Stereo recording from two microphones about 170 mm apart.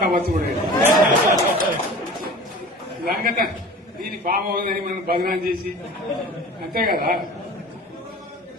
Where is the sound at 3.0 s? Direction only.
60° right (ahead or behind).